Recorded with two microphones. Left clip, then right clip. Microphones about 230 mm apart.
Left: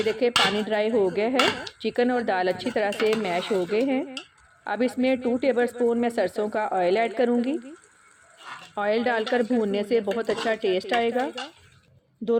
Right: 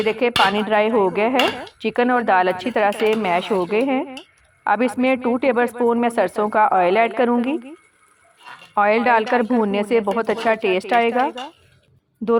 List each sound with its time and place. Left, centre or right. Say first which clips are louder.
0.0 s speech: right 5 dB; centre
8.7 s speech: right 8 dB; centre